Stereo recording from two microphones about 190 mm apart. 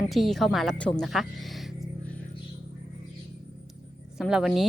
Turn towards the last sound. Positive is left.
turn(degrees=0)  # may be behind; listen again after turning